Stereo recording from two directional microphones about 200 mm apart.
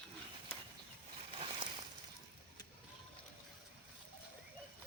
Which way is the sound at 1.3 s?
25° right (ahead or behind).